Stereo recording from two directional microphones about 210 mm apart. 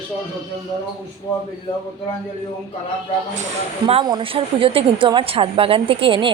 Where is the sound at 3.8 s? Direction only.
25° right (ahead or behind).